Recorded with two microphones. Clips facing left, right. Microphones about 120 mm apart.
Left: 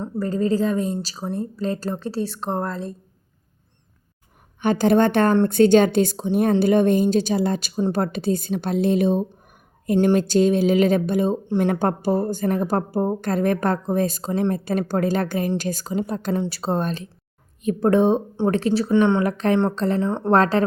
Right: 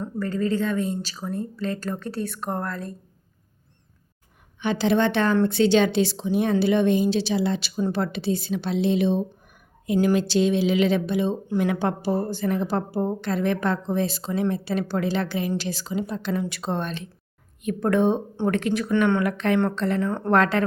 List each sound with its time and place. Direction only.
0.0 s speech: 35° left (ahead or behind)
4.6 s a woman's voice: 50° left (ahead or behind)
11.4 s a woman's voice: 35° left (ahead or behind)
16.3 s speech: 35° left (ahead or behind)
19.2 s speech: 35° left (ahead or behind)